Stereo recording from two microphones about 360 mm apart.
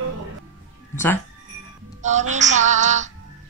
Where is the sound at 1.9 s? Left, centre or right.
Centre.